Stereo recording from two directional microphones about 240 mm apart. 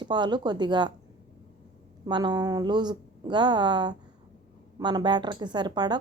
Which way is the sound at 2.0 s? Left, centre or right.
Centre.